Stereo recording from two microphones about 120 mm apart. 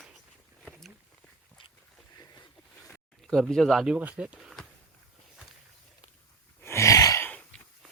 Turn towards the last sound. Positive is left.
turn(degrees=15)  # may be behind; listen again after turning